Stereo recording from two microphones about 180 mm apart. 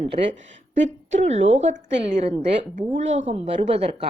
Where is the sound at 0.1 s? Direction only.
40° right (ahead or behind).